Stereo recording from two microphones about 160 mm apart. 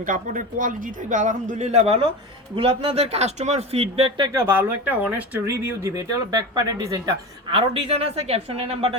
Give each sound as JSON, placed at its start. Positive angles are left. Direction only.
{"t": 0.0, "sound": "a man's voice", "side_deg": -55}
{"t": 4.3, "sound": "speech", "side_deg": -15}
{"t": 7.5, "sound": "speech", "side_deg": -35}